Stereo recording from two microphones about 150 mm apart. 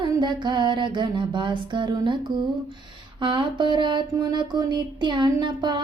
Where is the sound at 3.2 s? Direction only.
30° right (ahead or behind).